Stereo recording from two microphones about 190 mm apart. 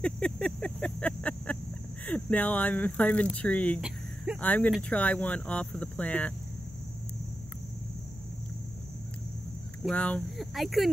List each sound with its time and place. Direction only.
0.0 s a sound: 5° left (ahead or behind)
2.0 s speech: 5° left (ahead or behind)
9.8 s speech: 5° left (ahead or behind)